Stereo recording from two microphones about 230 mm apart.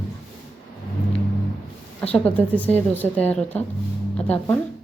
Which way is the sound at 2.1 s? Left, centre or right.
Centre.